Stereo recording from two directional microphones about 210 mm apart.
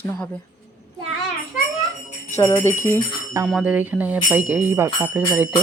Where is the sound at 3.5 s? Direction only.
5° right (ahead or behind).